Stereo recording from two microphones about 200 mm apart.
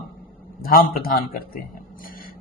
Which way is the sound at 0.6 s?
45° left (ahead or behind).